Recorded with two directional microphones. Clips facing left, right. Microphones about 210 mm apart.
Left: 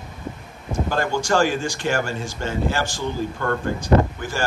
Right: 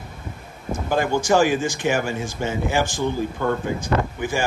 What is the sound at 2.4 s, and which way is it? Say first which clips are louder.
Speech: right 2 dB; 5° right (ahead or behind).